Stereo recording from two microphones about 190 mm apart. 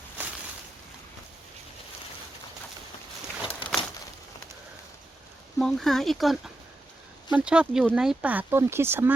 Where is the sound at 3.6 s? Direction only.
25° left (ahead or behind).